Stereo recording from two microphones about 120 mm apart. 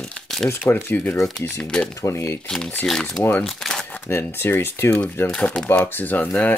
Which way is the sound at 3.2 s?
15° left (ahead or behind).